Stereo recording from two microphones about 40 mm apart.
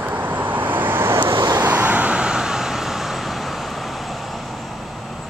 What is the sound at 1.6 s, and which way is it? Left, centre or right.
Vehicle, right.